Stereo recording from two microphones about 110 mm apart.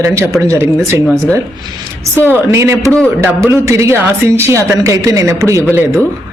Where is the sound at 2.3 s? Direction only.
25° right (ahead or behind).